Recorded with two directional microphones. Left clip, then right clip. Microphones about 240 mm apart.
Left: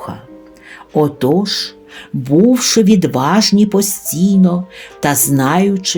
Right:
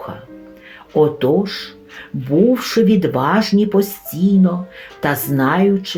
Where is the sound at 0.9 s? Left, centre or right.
Left.